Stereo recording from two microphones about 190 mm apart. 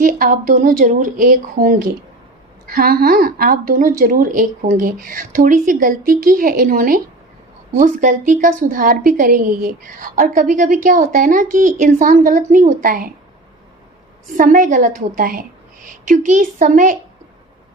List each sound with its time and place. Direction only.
0.0 s a woman's voice: 45° right (ahead or behind)
14.3 s a woman's voice: 45° right (ahead or behind)